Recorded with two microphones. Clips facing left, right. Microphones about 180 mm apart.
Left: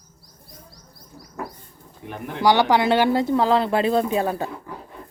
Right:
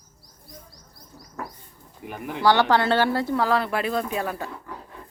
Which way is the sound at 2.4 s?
15° left (ahead or behind).